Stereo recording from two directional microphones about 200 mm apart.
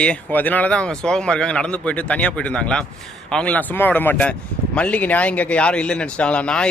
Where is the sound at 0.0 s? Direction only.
5° left (ahead or behind).